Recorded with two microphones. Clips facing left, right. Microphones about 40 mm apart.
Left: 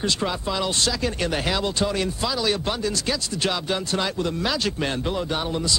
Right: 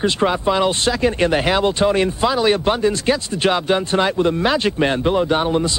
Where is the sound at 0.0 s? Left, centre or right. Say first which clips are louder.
Right 8 dB; right.